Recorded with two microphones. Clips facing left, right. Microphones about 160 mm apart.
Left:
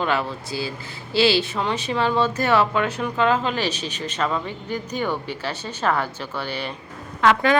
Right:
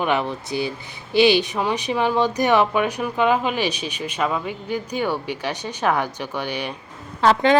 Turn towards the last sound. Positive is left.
turn(degrees=-30)  # may be behind; listen again after turning